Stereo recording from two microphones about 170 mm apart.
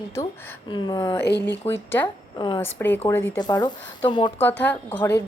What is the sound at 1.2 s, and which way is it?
Speech, 80° left.